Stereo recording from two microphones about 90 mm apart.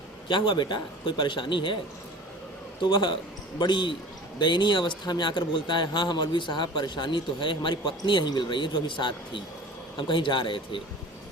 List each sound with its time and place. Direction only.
0.3 s speech: 60° left (ahead or behind)
2.8 s speech: 60° left (ahead or behind)